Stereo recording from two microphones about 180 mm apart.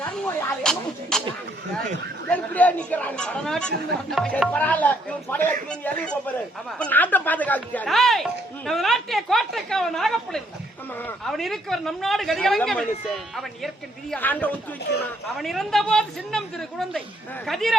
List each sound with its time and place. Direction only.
0.6 s speech: 5° left (ahead or behind)
2.2 s speech: 10° left (ahead or behind)
14.9 s speech: 70° left (ahead or behind)
15.4 s speech: centre (ahead or behind)